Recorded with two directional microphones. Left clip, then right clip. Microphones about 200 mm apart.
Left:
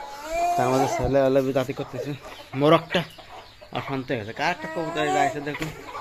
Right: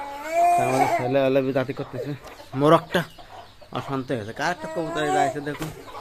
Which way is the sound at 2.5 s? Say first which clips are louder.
Right 1 dB; 15° right (ahead or behind).